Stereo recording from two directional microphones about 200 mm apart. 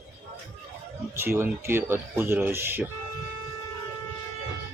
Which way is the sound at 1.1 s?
10° right (ahead or behind).